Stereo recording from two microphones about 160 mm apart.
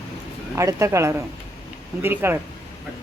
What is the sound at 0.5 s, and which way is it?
Speech, 20° right (ahead or behind).